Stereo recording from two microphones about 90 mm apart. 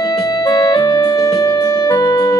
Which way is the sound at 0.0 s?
45° left (ahead or behind).